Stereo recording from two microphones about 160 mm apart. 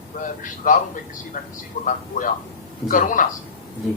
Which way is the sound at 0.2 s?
55° left (ahead or behind).